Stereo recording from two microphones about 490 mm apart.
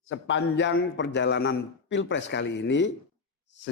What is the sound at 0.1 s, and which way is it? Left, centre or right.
Speech, left.